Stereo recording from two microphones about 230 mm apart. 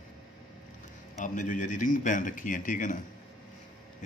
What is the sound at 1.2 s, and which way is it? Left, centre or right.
A man's voice, left.